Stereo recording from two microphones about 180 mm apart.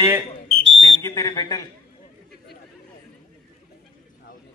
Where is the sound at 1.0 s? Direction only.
20° left (ahead or behind).